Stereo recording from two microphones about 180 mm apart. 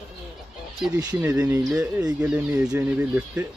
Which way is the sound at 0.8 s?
5° right (ahead or behind).